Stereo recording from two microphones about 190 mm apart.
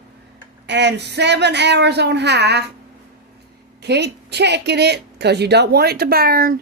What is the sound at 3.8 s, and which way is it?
A woman's voice, 60° right (ahead or behind).